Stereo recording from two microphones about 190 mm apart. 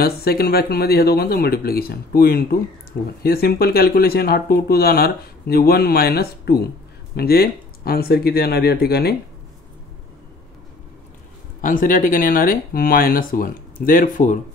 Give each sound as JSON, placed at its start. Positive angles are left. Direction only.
{"t": 0.0, "sound": "speech", "side_deg": 55}
{"t": 11.6, "sound": "speech", "side_deg": 45}